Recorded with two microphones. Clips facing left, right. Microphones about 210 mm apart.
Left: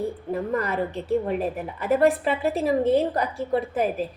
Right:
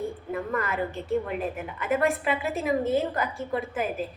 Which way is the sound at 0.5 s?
35° left (ahead or behind).